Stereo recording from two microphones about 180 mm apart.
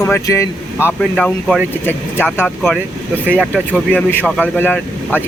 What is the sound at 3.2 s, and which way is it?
Speech, 10° right (ahead or behind).